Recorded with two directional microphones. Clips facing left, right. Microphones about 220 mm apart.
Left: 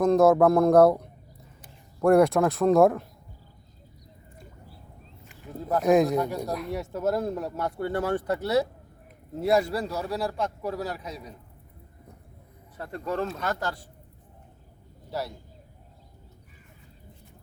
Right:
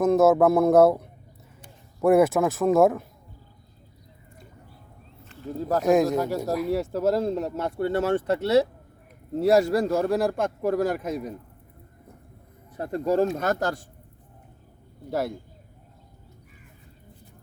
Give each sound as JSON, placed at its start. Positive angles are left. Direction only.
{"t": 0.0, "sound": "speech", "side_deg": -5}
{"t": 5.8, "sound": "speech", "side_deg": 0}
{"t": 6.7, "sound": "speech", "side_deg": -30}
{"t": 9.3, "sound": "speech", "side_deg": -40}
{"t": 12.7, "sound": "speech", "side_deg": -45}
{"t": 15.1, "sound": "speech", "side_deg": -50}